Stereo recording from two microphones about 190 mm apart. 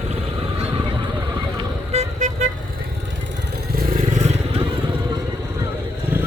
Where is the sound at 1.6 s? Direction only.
35° right (ahead or behind).